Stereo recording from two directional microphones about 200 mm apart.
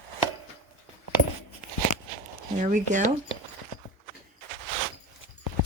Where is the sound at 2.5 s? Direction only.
40° right (ahead or behind).